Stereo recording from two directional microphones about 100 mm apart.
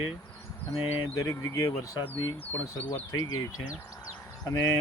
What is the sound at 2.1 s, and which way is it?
Speech, 15° left (ahead or behind).